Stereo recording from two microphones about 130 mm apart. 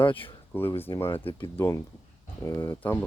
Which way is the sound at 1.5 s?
20° left (ahead or behind).